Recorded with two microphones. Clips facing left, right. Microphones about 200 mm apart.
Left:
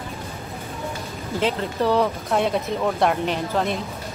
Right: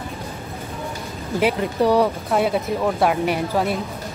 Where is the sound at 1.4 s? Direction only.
15° right (ahead or behind).